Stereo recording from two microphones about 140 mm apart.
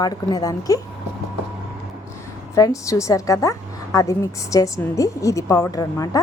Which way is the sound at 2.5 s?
25° left (ahead or behind).